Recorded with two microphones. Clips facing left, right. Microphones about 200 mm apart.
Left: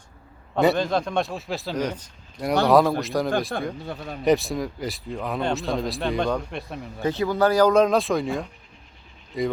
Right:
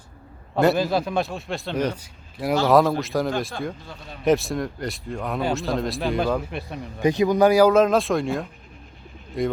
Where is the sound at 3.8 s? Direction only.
60° left (ahead or behind).